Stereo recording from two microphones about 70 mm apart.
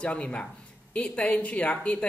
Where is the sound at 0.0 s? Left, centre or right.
Centre.